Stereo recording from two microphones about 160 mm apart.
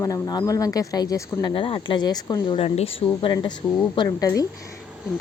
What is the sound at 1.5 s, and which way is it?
A woman's voice, 30° left (ahead or behind).